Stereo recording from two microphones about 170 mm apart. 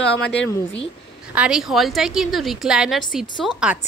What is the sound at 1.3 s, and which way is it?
A woman's voice, 5° right (ahead or behind).